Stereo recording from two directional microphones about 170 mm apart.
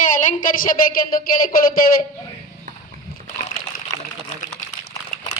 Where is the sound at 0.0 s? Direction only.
50° left (ahead or behind).